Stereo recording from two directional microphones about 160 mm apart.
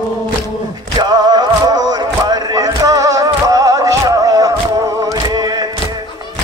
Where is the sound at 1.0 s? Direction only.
25° right (ahead or behind).